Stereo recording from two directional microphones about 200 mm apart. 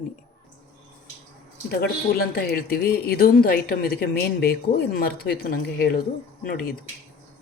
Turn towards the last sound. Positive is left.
turn(degrees=50)  # may be behind; listen again after turning